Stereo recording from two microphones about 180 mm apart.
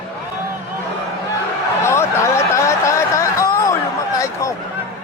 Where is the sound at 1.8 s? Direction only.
15° left (ahead or behind).